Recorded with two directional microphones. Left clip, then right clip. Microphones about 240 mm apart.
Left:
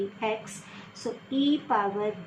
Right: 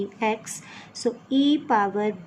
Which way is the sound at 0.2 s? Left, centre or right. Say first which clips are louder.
Right 5 dB; right.